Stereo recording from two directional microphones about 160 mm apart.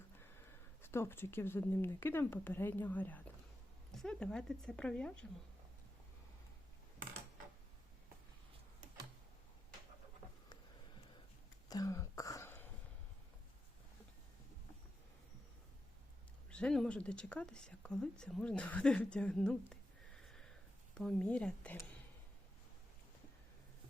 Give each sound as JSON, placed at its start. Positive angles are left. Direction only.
{"t": 0.2, "sound": "speech", "side_deg": 15}
{"t": 11.7, "sound": "throat clearing", "side_deg": 20}
{"t": 16.5, "sound": "speech", "side_deg": 5}
{"t": 20.2, "sound": "a sound", "side_deg": 5}